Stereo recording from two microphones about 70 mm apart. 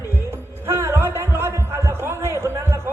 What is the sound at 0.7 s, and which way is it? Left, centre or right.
Heart sounds, right.